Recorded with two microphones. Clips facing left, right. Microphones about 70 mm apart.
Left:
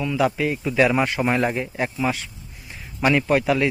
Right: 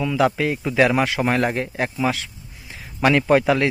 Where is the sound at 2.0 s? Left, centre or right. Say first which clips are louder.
Right 2 dB; right.